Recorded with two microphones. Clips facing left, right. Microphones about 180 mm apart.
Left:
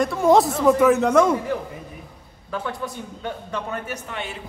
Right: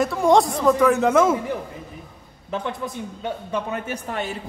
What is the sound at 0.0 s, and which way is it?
Speech, centre (ahead or behind).